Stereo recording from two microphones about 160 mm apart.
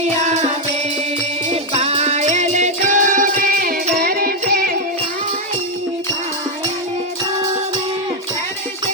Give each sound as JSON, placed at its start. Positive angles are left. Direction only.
{"t": 1.5, "sound": "music", "side_deg": -40}